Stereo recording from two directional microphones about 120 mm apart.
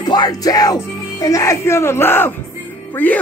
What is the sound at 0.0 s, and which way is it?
Speech, 35° left (ahead or behind).